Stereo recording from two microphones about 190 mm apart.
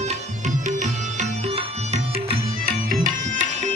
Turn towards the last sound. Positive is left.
turn(degrees=-45)  # may be behind; listen again after turning